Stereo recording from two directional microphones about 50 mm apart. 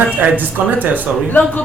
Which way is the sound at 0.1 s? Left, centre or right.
Right.